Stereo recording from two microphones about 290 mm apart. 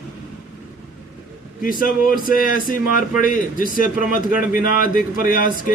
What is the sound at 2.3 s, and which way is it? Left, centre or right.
A man's voice, left.